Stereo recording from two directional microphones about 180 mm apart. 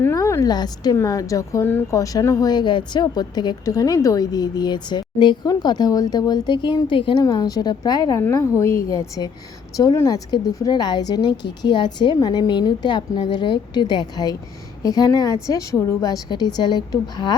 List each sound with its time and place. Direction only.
0.0 s a woman's voice: 15° left (ahead or behind)